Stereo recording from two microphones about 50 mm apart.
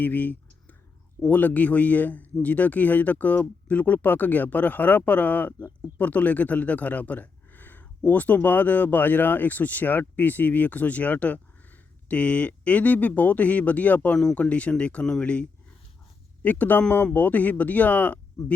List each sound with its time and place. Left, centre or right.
0.0 s clicking: left
1.3 s speech: left